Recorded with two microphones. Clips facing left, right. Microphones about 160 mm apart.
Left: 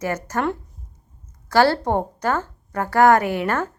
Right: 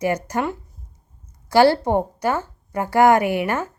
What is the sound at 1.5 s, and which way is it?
Speech, 15° right (ahead or behind).